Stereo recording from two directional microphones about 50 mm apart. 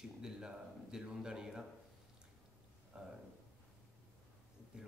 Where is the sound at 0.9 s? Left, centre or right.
Centre.